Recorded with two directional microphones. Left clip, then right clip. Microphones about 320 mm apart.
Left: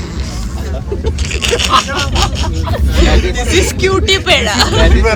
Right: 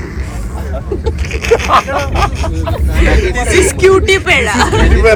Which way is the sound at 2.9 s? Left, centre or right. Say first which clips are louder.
Right 1 dB; centre.